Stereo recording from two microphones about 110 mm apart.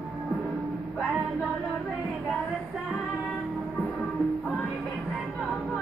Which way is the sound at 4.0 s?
Centre (ahead or behind).